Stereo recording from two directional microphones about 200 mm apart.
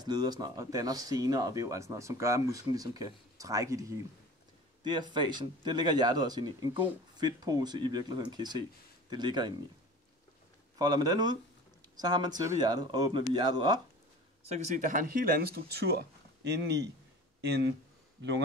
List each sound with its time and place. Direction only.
0.0 s speech: 20° right (ahead or behind)
4.8 s speech: 20° right (ahead or behind)
10.8 s speech: 20° right (ahead or behind)
14.4 s speech: 35° right (ahead or behind); by 16.0 s 50° right (ahead or behind)
17.4 s speech: 55° right (ahead or behind)